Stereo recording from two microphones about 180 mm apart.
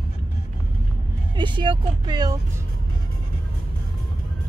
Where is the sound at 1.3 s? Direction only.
25° right (ahead or behind).